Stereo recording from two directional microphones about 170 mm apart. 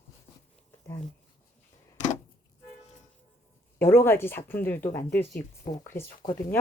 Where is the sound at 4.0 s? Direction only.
15° left (ahead or behind).